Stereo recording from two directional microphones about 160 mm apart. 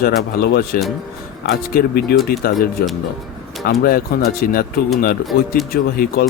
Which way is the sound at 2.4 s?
70° left (ahead or behind).